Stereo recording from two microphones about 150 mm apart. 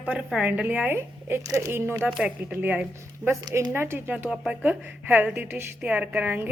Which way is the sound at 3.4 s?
25° right (ahead or behind).